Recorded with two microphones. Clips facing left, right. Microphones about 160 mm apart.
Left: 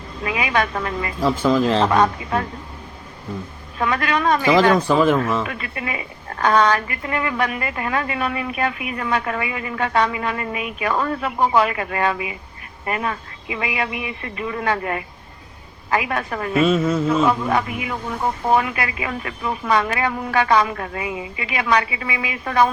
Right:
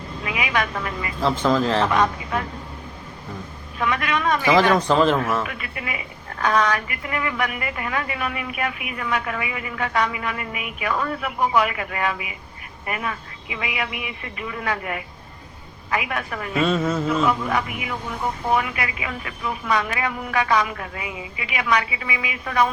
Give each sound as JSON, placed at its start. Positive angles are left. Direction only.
{"t": 0.3, "sound": "a woman's voice", "side_deg": 35}
{"t": 1.2, "sound": "speech", "side_deg": 10}
{"t": 1.9, "sound": "a woman's voice", "side_deg": 30}
{"t": 3.8, "sound": "a woman's voice", "side_deg": 35}
{"t": 4.9, "sound": "speech", "side_deg": 10}
{"t": 5.5, "sound": "a woman's voice", "side_deg": 35}
{"t": 16.6, "sound": "mantra", "side_deg": 5}
{"t": 17.2, "sound": "a woman's voice", "side_deg": 30}